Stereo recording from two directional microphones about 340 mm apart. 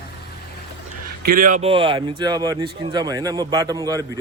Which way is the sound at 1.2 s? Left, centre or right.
Right.